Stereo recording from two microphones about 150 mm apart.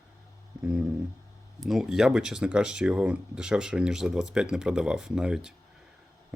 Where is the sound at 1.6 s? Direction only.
Centre (ahead or behind).